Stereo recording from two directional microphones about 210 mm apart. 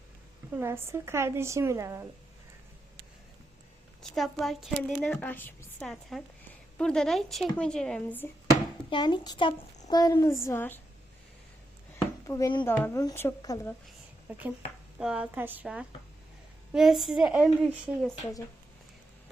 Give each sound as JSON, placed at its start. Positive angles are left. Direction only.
{"t": 0.5, "sound": "a woman's voice", "side_deg": -10}
{"t": 4.1, "sound": "a woman's voice", "side_deg": 0}
{"t": 8.9, "sound": "speech", "side_deg": 20}
{"t": 12.3, "sound": "speech", "side_deg": 15}
{"t": 14.9, "sound": "a woman's voice", "side_deg": -5}